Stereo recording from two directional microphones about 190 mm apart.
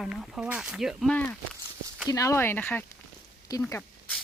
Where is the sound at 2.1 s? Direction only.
15° left (ahead or behind).